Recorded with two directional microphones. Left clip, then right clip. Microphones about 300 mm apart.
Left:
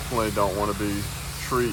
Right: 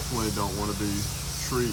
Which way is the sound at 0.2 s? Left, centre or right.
Centre.